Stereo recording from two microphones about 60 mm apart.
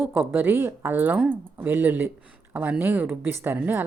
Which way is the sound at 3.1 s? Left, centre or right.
Right.